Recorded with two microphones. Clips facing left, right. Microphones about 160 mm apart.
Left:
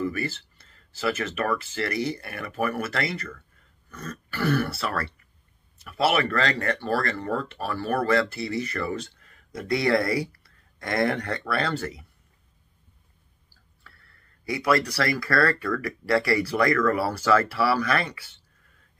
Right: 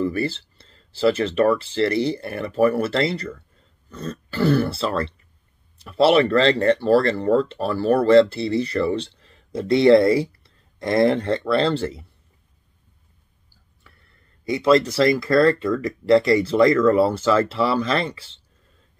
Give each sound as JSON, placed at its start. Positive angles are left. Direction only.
{"t": 0.0, "sound": "speech", "side_deg": -30}
{"t": 13.8, "sound": "speech", "side_deg": -20}